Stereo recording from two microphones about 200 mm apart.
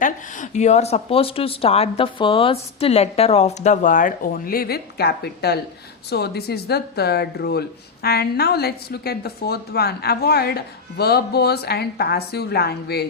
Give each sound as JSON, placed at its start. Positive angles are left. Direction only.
{"t": 0.0, "sound": "a woman's voice", "side_deg": 40}